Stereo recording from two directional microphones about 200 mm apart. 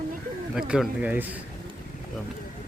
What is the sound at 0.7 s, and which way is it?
Speech, 5° right (ahead or behind).